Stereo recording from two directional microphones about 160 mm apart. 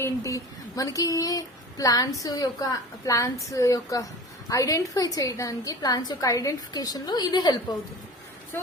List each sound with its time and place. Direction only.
0.0 s speech: 20° left (ahead or behind)